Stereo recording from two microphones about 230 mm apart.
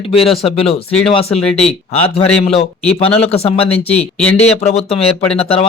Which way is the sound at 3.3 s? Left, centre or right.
Left.